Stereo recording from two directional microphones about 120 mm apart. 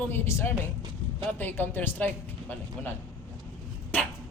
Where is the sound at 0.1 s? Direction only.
20° left (ahead or behind).